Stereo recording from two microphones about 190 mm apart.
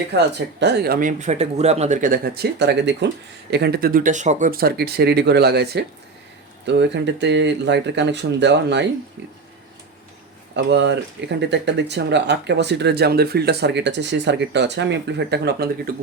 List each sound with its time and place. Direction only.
0.1 s speech: 65° right (ahead or behind)
10.5 s speech: 65° right (ahead or behind)